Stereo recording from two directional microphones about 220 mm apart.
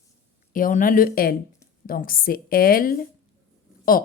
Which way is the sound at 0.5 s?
40° left (ahead or behind).